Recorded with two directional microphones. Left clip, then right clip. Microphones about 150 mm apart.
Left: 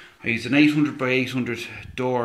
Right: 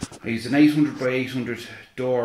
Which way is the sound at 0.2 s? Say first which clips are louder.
Even; 30° left (ahead or behind).